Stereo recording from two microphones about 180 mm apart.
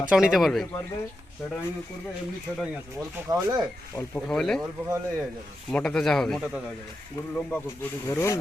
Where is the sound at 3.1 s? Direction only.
15° right (ahead or behind).